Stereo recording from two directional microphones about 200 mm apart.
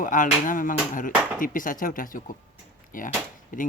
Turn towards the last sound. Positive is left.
turn(degrees=40)  # may be behind; listen again after turning